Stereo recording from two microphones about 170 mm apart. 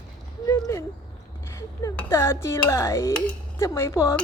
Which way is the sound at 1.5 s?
20° left (ahead or behind).